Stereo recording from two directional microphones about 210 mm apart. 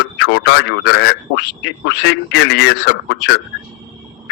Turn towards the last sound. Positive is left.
turn(degrees=55)  # may be behind; listen again after turning